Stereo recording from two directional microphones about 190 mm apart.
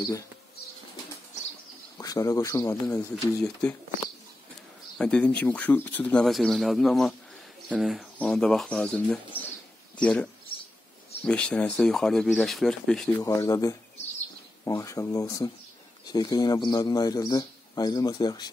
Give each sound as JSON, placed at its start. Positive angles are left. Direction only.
{"t": 2.0, "sound": "speech", "side_deg": 20}
{"t": 4.9, "sound": "speech", "side_deg": 5}
{"t": 13.2, "sound": "a man's voice", "side_deg": 15}